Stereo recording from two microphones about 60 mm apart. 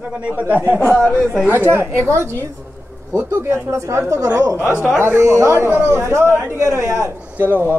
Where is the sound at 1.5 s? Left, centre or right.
Right.